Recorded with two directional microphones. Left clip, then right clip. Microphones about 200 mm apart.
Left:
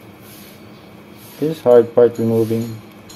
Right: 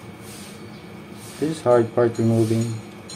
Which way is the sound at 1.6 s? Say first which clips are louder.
Left 7 dB; 35° left (ahead or behind).